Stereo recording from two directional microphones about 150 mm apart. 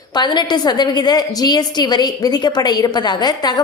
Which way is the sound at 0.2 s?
30° left (ahead or behind).